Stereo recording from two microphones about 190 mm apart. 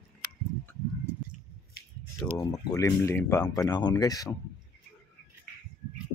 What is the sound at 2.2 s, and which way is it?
Speech, 20° left (ahead or behind).